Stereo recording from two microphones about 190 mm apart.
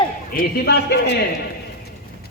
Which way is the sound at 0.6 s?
60° left (ahead or behind).